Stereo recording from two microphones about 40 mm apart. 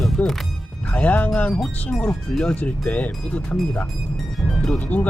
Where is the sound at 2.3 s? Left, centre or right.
Left.